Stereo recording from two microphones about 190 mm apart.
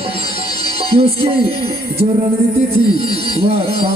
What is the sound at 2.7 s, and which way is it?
Music, 30° right (ahead or behind).